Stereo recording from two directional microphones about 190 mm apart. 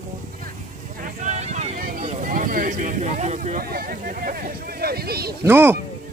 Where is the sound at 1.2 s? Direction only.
35° right (ahead or behind).